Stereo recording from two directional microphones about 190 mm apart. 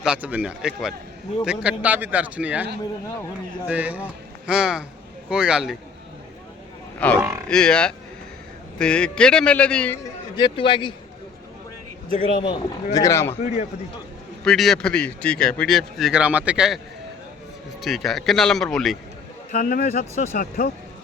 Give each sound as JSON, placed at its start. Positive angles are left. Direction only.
{"t": 0.0, "sound": "a man's voice", "side_deg": -5}
{"t": 3.7, "sound": "a man's voice", "side_deg": -10}
{"t": 7.0, "sound": "speech", "side_deg": 5}
{"t": 10.3, "sound": "a man's voice", "side_deg": 25}
{"t": 12.4, "sound": "speech", "side_deg": 20}
{"t": 13.3, "sound": "a man's voice", "side_deg": 35}
{"t": 14.4, "sound": "speech", "side_deg": 0}
{"t": 17.8, "sound": "speech", "side_deg": 0}
{"t": 19.5, "sound": "speech", "side_deg": 45}